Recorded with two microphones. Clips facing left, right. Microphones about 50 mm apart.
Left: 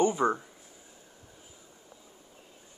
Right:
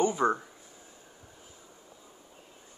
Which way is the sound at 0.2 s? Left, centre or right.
Centre.